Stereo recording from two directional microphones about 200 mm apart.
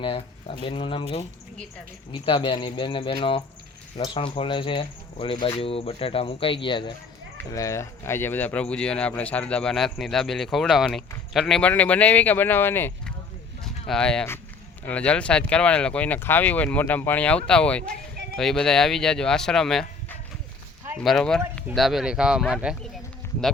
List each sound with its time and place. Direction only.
0.0 s speech: 30° left (ahead or behind); by 22.9 s centre (ahead or behind)